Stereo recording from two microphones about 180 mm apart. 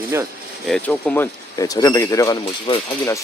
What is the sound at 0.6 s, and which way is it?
Speech, 5° left (ahead or behind).